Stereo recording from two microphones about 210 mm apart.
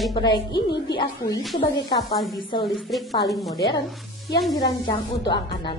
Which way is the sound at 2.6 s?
Centre (ahead or behind).